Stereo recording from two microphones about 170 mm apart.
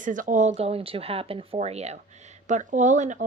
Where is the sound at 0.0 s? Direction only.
50° right (ahead or behind).